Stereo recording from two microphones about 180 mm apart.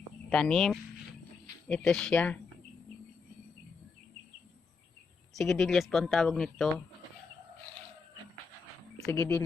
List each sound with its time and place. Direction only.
0.3 s speech: 5° left (ahead or behind)
5.3 s speech: centre (ahead or behind)
9.0 s speech: 15° left (ahead or behind)